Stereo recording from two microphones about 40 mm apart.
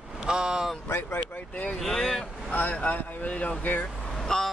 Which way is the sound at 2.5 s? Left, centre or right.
Left.